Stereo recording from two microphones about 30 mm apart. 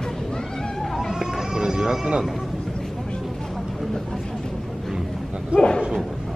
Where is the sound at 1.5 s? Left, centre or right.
Right.